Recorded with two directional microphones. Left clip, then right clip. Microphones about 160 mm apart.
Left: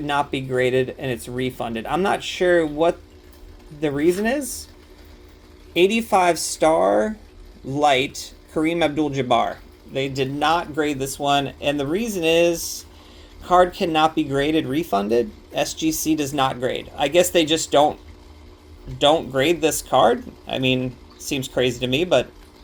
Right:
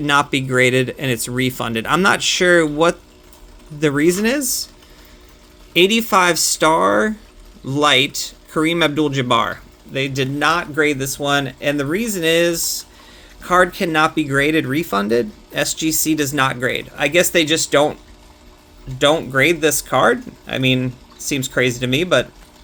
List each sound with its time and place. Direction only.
0.0 s speech: 80° right
4.2 s speech: 65° right (ahead or behind)
5.7 s speech: 55° right (ahead or behind)
18.9 s speech: 45° right (ahead or behind)